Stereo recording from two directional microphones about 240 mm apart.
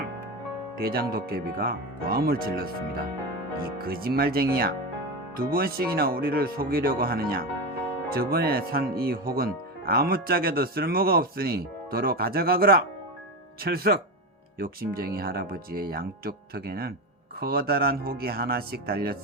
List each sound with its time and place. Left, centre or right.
0.8 s speech: right
3.8 s speech: right